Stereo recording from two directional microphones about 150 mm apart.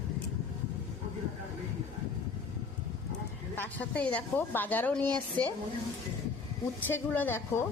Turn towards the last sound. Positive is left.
turn(degrees=15)  # may be behind; listen again after turning